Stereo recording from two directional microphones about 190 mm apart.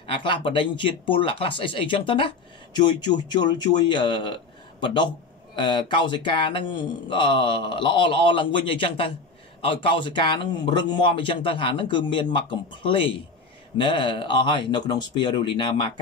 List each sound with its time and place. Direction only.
0.0 s speech: 25° left (ahead or behind)
3.9 s speech: 25° left (ahead or behind)